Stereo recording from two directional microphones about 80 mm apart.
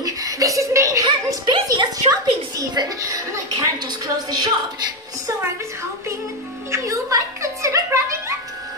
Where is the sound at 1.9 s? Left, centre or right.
Right.